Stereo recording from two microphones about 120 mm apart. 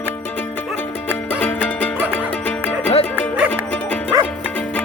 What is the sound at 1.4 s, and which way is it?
Music, 10° left (ahead or behind).